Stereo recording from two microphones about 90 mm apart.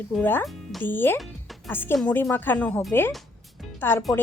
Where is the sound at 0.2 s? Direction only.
25° left (ahead or behind).